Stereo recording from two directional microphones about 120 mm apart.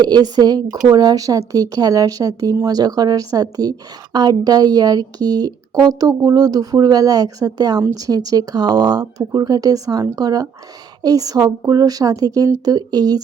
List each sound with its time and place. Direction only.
0.0 s a woman's voice: 35° right (ahead or behind)